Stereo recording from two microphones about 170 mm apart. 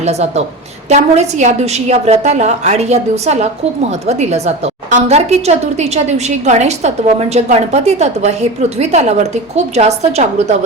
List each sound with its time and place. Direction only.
0.0 s a woman's voice: 40° right (ahead or behind)